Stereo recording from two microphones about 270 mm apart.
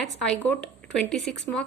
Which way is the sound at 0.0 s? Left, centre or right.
Centre.